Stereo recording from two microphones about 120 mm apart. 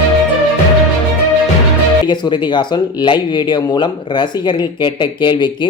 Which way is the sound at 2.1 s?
40° left (ahead or behind).